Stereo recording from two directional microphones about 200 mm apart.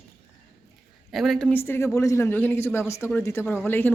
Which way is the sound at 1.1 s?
Centre (ahead or behind).